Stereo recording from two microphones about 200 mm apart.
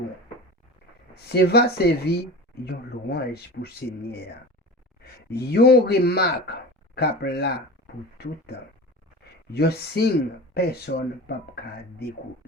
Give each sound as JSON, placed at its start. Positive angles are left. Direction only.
{"t": 1.1, "sound": "speech", "side_deg": 55}